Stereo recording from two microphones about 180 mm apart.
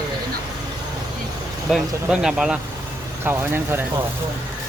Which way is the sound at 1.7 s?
5° right (ahead or behind).